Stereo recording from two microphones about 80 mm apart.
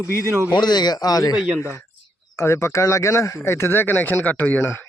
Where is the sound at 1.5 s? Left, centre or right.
Left.